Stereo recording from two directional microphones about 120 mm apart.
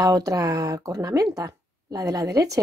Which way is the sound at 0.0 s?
30° right (ahead or behind).